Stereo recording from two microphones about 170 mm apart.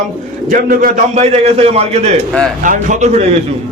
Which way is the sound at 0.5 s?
55° right (ahead or behind).